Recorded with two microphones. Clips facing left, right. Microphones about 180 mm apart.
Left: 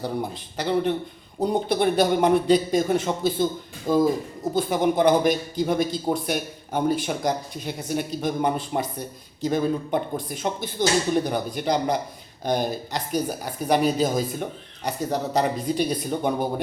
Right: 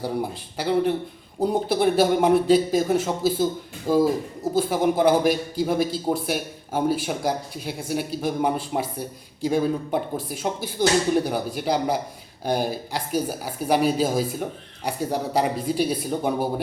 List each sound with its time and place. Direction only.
0.0 s speech: 10° right (ahead or behind)